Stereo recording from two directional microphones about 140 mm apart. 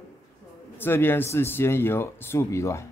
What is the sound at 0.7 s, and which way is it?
Speech, 15° left (ahead or behind).